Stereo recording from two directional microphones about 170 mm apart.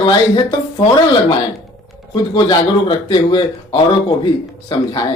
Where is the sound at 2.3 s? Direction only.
25° left (ahead or behind).